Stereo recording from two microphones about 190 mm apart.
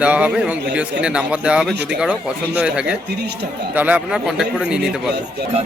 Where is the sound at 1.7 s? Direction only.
60° right (ahead or behind).